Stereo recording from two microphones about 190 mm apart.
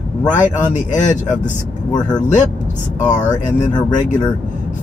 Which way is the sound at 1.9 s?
20° left (ahead or behind).